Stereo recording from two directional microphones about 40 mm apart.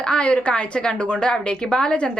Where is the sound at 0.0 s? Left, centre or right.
Left.